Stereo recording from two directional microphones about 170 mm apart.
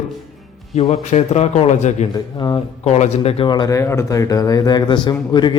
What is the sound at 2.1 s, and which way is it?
Speech, 25° left (ahead or behind).